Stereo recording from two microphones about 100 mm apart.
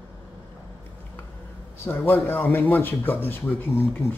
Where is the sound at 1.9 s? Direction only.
25° left (ahead or behind).